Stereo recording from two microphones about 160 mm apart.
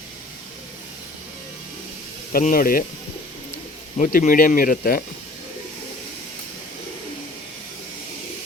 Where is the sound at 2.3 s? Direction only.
60° left (ahead or behind).